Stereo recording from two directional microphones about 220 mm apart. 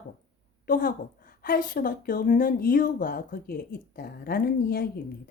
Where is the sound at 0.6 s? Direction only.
40° left (ahead or behind).